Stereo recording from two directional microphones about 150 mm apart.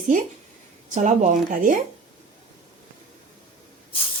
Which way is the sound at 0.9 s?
55° right (ahead or behind).